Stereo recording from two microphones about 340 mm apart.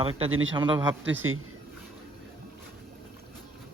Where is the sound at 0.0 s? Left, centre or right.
Centre.